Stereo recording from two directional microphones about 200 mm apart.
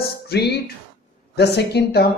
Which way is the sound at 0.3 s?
55° left (ahead or behind).